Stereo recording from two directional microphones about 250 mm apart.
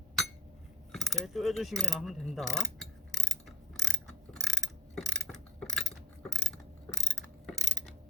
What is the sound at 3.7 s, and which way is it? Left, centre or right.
Mechanisms, centre.